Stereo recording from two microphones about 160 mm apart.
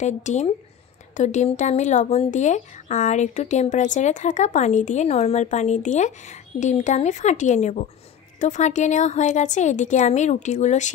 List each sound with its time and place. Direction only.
0.0 s speech: 45° left (ahead or behind)